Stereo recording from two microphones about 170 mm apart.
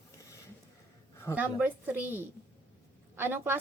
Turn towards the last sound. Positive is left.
turn(degrees=-10)  # may be behind; listen again after turning